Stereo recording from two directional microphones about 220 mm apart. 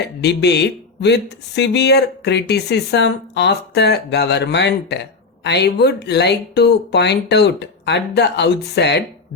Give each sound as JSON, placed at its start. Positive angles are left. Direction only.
{"t": 0.0, "sound": "speech", "side_deg": 50}